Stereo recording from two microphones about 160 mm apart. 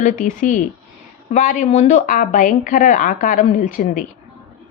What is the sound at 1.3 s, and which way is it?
A woman's voice, 55° left (ahead or behind).